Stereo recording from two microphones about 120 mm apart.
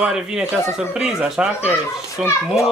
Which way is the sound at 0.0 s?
5° right (ahead or behind).